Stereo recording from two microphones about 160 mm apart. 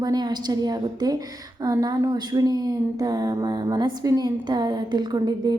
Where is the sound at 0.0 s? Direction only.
25° right (ahead or behind).